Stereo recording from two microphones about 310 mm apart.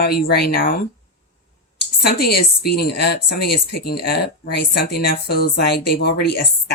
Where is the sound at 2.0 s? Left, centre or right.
Left.